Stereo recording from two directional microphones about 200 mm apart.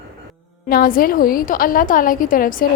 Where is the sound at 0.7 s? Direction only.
45° left (ahead or behind).